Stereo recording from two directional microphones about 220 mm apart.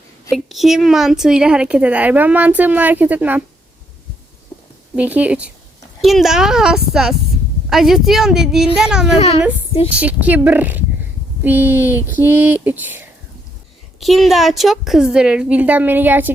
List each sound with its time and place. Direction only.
0.3 s a woman's voice: centre (ahead or behind)
4.9 s a woman's voice: 5° right (ahead or behind)
9.1 s a child's voice: 30° left (ahead or behind)
9.9 s a woman's voice: 5° right (ahead or behind)